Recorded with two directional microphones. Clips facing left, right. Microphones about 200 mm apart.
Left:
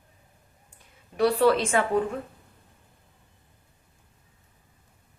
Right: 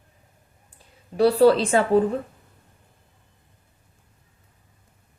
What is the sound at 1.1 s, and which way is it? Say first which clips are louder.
Speech: right 5 dB; 30° right (ahead or behind).